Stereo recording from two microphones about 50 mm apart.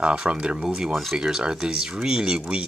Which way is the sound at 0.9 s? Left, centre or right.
Centre.